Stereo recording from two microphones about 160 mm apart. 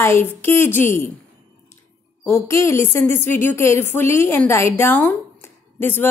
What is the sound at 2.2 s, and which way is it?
A woman's voice, 15° left (ahead or behind).